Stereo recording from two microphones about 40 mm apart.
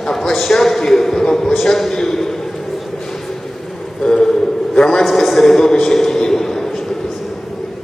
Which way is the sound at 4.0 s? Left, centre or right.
Centre.